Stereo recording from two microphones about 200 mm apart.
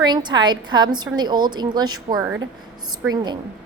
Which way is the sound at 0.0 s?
20° right (ahead or behind).